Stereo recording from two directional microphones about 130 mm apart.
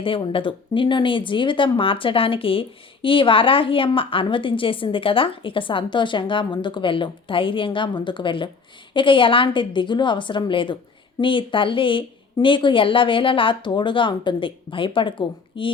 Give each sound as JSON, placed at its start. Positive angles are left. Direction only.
{"t": 0.0, "sound": "speech", "side_deg": 40}